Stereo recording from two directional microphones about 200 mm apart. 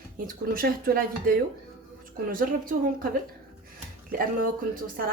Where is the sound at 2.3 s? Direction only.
45° right (ahead or behind).